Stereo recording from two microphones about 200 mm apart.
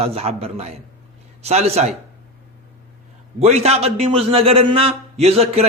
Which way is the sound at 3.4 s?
30° right (ahead or behind).